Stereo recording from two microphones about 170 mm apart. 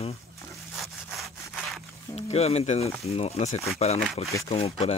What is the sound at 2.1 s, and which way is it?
Speech, 40° left (ahead or behind).